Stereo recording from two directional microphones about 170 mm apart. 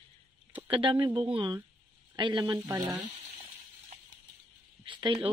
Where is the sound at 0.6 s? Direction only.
30° right (ahead or behind).